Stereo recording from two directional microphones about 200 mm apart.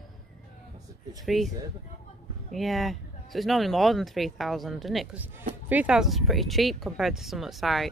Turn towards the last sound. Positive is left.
turn(degrees=0)  # may be behind; listen again after turning